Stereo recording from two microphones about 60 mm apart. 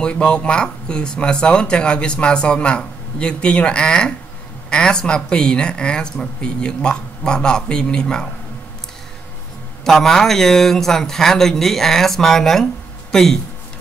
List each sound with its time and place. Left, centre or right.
0.0 s speech: centre
9.8 s speech: centre